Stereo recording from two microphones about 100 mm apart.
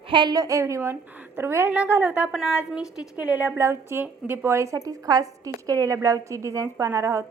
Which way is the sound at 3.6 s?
25° right (ahead or behind).